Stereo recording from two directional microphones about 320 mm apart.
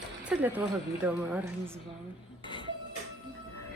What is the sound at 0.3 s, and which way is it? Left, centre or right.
A woman's voice, centre.